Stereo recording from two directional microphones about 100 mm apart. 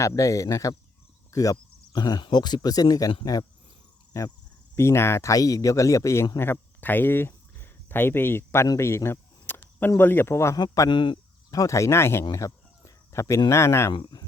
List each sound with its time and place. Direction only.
0.0 s speech: 30° left (ahead or behind)
4.1 s speech: 30° left (ahead or behind)
6.4 s speech: 20° left (ahead or behind)
8.8 s cricket: 25° left (ahead or behind)
10.0 s speech: 20° left (ahead or behind)
10.6 s speech: 50° left (ahead or behind)
11.5 s speech: 35° left (ahead or behind)
12.3 s a sound: 30° left (ahead or behind)
13.5 s speech: 25° left (ahead or behind)
13.9 s speech: 45° left (ahead or behind)